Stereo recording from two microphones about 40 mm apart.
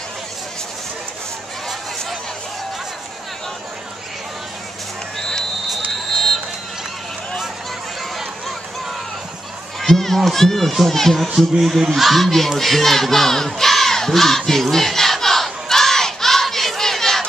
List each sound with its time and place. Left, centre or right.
6.1 s run: centre
9.8 s speech: centre
11.3 s speech: centre
14.4 s battle cry: centre